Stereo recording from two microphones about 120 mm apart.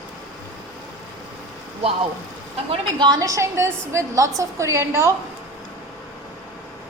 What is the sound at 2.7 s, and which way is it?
A woman's voice, 40° right (ahead or behind).